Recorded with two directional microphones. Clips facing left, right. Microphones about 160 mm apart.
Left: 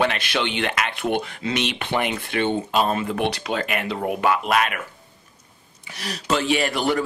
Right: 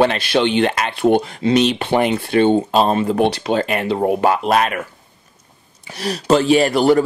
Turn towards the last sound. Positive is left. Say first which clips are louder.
# right 9 dB
turn(degrees=-35)  # may be behind; listen again after turning